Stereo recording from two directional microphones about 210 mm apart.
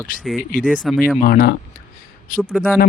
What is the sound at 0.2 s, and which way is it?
Speech, centre (ahead or behind).